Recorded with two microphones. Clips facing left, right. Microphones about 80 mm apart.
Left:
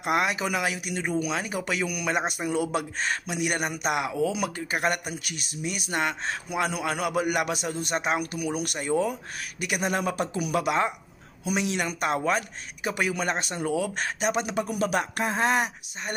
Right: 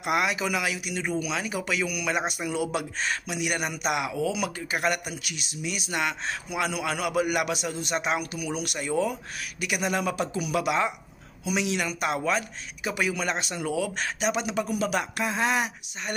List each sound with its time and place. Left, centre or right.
0.0 s a man's voice: left